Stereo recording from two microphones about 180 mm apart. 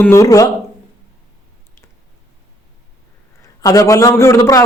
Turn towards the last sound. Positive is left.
turn(degrees=20)  # may be behind; listen again after turning